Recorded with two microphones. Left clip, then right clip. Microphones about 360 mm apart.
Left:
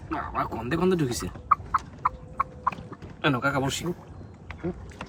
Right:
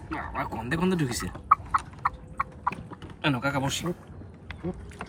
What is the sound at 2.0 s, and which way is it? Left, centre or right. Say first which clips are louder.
Chicken: left 2 dB; centre.